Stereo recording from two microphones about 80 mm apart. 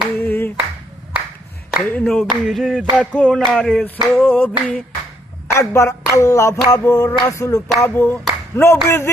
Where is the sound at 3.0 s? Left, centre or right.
Centre.